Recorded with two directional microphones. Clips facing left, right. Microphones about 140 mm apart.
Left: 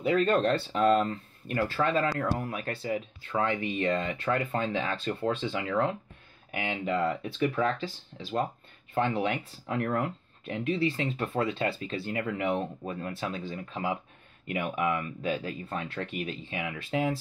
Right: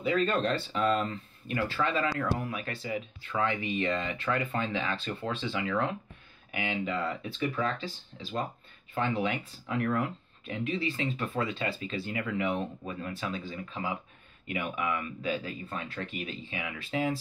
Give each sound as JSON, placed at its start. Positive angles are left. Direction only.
{"t": 0.0, "sound": "speech", "side_deg": 50}
{"t": 8.9, "sound": "speech", "side_deg": 50}